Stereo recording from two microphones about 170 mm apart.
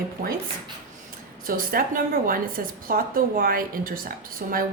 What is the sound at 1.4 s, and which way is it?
A woman's voice, 55° right (ahead or behind).